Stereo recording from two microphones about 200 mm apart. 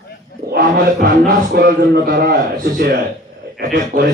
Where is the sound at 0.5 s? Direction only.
50° right (ahead or behind).